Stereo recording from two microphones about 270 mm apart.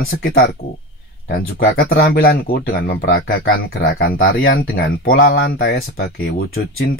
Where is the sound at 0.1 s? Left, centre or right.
Left.